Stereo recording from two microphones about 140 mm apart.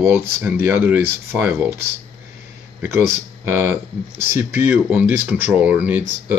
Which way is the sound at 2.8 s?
15° right (ahead or behind).